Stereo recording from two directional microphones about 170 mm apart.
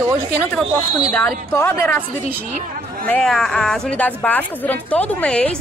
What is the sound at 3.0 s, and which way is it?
Speech, 5° left (ahead or behind).